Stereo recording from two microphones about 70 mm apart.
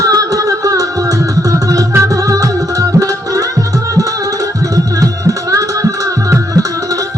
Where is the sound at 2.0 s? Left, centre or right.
Right.